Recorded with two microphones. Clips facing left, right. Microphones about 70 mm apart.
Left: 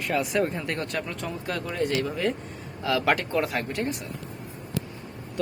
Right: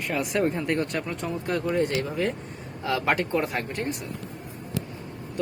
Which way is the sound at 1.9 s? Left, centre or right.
Right.